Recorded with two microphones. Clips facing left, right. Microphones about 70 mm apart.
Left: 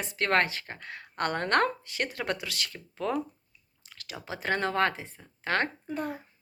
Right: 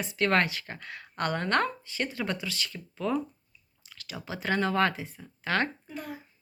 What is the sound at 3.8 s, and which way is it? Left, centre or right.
Clicking, left.